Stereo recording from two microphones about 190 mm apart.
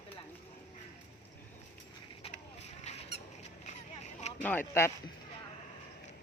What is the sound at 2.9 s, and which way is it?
Squeak, 35° left (ahead or behind).